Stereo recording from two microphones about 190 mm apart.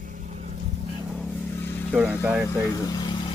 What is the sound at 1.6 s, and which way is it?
Vehicle, 10° left (ahead or behind).